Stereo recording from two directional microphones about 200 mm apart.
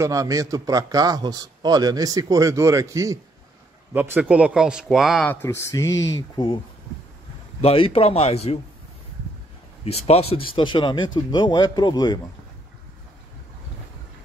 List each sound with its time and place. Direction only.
0.0 s a man's voice: 15° right (ahead or behind)
5.3 s speech: 10° left (ahead or behind)
7.6 s speech: 30° left (ahead or behind)
9.8 s speech: 30° left (ahead or behind)